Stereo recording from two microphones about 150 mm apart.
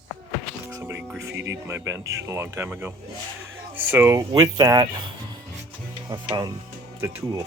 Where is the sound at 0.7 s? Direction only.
15° right (ahead or behind).